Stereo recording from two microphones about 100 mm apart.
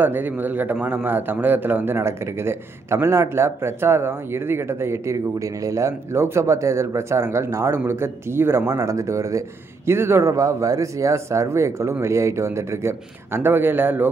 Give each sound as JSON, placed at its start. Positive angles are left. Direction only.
{"t": 0.0, "sound": "speech", "side_deg": -20}